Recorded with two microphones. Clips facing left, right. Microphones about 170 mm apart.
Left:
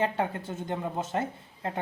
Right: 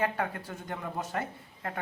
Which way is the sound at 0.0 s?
25° left (ahead or behind).